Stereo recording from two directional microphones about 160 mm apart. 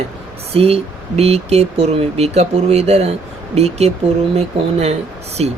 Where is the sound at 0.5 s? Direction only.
40° right (ahead or behind).